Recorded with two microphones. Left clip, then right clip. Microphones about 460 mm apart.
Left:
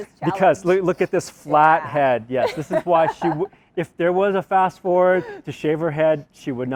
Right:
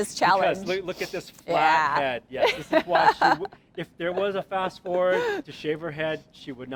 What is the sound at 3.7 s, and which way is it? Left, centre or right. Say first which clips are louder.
Speech: left 9 dB; left.